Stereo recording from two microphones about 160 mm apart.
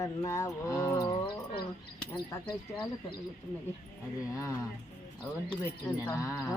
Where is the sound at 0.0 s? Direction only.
20° left (ahead or behind).